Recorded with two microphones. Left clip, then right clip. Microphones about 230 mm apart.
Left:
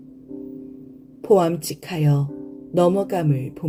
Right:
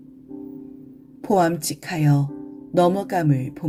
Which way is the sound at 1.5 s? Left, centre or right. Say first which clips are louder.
Even; right.